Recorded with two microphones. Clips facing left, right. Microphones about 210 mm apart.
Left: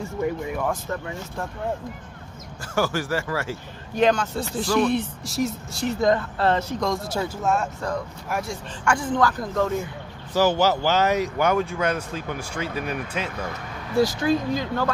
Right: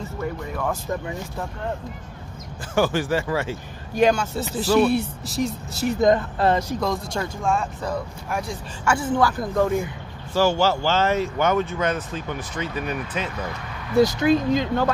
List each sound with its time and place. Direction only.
0.2 s speech: 15° left (ahead or behind)
2.7 s speech: 20° right (ahead or behind)
3.9 s speech: 10° right (ahead or behind)
5.9 s speech: 20° right (ahead or behind)
10.3 s speech: 15° left (ahead or behind)
13.9 s speech: 20° right (ahead or behind)